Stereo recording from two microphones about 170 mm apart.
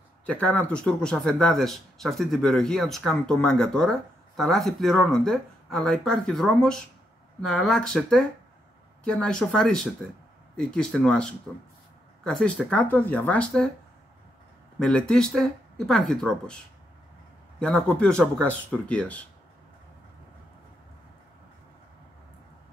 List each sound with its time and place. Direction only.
0.3 s speech: 5° left (ahead or behind)
14.8 s speech: 5° left (ahead or behind)
17.6 s speech: 5° left (ahead or behind)